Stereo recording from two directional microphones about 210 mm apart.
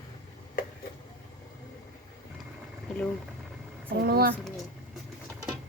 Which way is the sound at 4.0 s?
45° right (ahead or behind).